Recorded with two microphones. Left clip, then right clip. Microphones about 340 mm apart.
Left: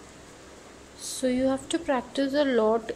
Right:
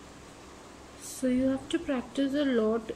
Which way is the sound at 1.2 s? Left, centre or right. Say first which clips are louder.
Left 3 dB; centre.